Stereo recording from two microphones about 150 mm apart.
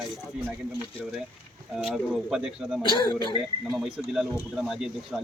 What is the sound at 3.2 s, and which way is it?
Speech, 25° right (ahead or behind).